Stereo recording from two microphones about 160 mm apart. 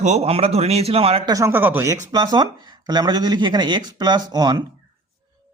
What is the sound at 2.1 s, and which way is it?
Speech, 25° right (ahead or behind).